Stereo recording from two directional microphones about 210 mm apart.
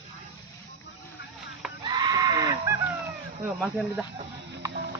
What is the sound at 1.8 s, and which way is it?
Goat, 20° right (ahead or behind).